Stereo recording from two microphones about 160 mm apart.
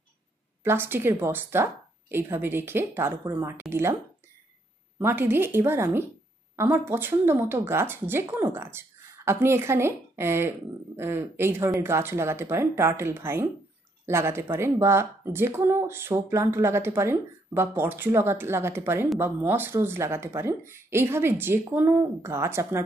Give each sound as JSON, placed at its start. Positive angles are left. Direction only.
{"t": 0.7, "sound": "speech", "side_deg": -15}
{"t": 4.9, "sound": "speech", "side_deg": -15}